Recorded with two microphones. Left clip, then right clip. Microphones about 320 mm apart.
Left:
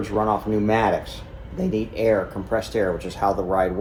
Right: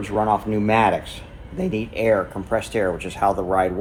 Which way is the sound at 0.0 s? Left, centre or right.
Right.